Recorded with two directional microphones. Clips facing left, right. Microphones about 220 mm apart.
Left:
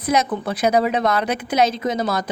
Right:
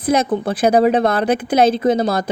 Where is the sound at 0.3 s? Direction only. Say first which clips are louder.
Right 4 dB; 30° right (ahead or behind).